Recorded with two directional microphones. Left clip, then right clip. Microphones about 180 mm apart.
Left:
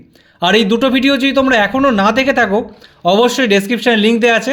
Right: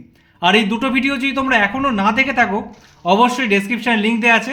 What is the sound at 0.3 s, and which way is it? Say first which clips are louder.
Speech: left 3 dB; 60° left (ahead or behind).